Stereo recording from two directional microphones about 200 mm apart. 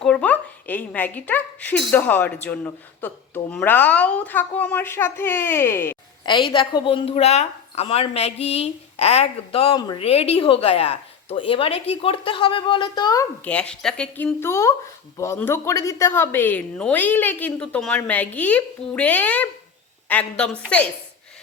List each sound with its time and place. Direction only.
0.0 s speech: 5° left (ahead or behind)
6.2 s a woman's voice: 25° left (ahead or behind)
13.4 s speech: 5° left (ahead or behind)